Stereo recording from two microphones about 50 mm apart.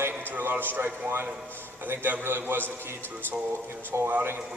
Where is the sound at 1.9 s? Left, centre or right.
Right.